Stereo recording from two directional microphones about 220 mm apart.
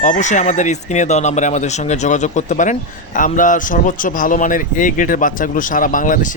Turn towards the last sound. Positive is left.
turn(degrees=40)  # may be behind; listen again after turning